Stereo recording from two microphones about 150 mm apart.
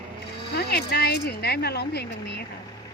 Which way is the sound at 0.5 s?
90° left.